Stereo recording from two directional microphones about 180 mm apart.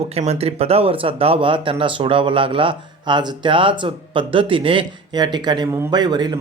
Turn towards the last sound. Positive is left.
turn(degrees=-25)  # may be behind; listen again after turning